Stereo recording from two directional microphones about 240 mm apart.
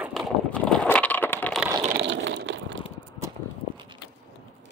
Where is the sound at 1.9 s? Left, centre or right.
Right.